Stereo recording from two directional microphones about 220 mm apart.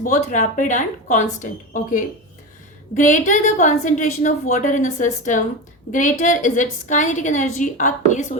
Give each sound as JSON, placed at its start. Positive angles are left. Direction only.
{"t": 0.0, "sound": "a woman's voice", "side_deg": 35}